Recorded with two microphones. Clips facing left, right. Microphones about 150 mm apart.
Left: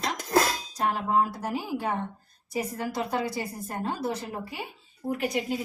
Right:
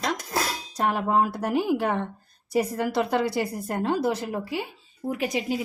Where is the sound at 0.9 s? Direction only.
65° right (ahead or behind).